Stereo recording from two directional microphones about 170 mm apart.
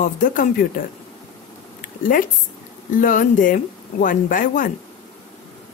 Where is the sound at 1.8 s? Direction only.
50° left (ahead or behind).